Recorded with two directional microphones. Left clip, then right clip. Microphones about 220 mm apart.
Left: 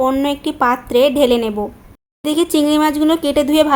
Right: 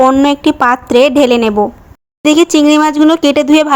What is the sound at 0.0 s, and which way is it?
A woman's voice, 25° right (ahead or behind).